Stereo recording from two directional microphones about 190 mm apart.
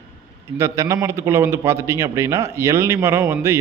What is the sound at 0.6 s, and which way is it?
Speech, 15° right (ahead or behind).